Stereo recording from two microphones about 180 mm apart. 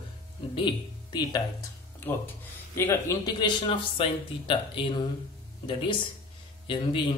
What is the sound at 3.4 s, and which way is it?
Speech, 25° left (ahead or behind).